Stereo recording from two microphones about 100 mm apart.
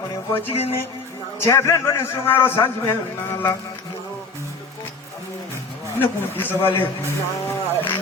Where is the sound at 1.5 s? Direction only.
30° left (ahead or behind).